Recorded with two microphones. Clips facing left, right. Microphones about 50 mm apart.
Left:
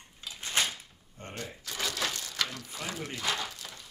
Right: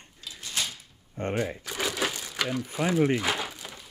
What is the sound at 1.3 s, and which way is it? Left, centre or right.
Crumpling, right.